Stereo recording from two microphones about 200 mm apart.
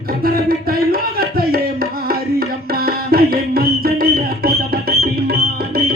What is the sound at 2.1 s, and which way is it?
Music, 50° right (ahead or behind).